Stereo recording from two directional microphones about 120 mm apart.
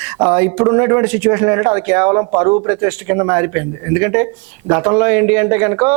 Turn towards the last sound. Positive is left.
turn(degrees=-25)  # may be behind; listen again after turning